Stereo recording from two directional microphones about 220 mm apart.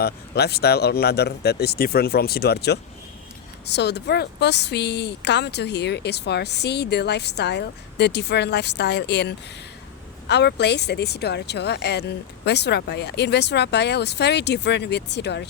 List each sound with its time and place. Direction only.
0.0 s speech: 50° left (ahead or behind)